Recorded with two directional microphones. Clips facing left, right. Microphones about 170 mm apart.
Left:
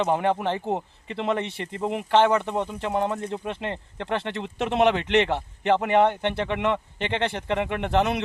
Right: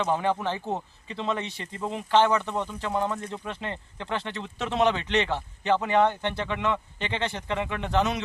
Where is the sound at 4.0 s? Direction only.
65° left (ahead or behind).